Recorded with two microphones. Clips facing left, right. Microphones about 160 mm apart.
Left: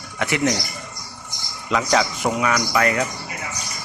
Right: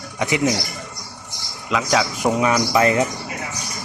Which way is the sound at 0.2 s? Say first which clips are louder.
Right 1 dB; 15° right (ahead or behind).